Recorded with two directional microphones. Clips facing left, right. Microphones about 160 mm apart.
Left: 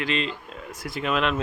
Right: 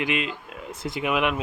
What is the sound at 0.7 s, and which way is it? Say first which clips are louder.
Speech: right 1 dB; 20° right (ahead or behind).